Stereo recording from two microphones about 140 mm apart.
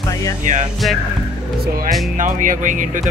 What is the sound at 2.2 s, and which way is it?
Speech, 70° right (ahead or behind).